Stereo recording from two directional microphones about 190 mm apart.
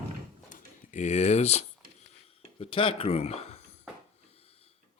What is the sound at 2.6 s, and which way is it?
Speech, 30° left (ahead or behind).